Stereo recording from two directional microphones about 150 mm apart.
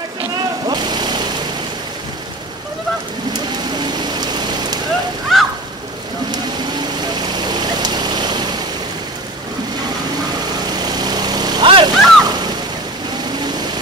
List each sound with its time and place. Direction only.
0.7 s vehicle: 30° right (ahead or behind)
4.2 s rain: 30° right (ahead or behind)
5.3 s a sound: centre (ahead or behind)
7.2 s vehicle: 25° right (ahead or behind)
10.8 s vehicle: 25° right (ahead or behind)